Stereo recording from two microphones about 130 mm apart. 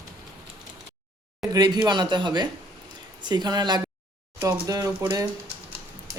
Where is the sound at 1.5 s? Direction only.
35° right (ahead or behind).